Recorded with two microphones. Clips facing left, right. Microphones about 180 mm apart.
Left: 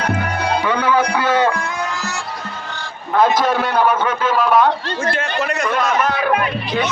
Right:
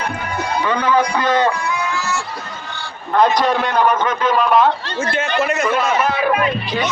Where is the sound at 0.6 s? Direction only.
10° left (ahead or behind).